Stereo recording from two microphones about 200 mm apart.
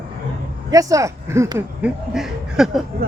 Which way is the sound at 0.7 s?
15° right (ahead or behind).